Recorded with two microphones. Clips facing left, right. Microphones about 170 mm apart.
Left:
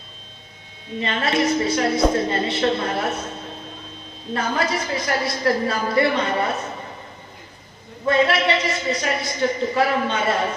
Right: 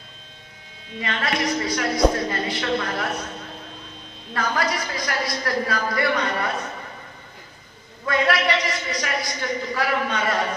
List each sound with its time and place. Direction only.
0.9 s a woman's voice: 25° left (ahead or behind)
4.4 s a woman's voice: 25° left (ahead or behind)
8.0 s a woman's voice: 25° left (ahead or behind)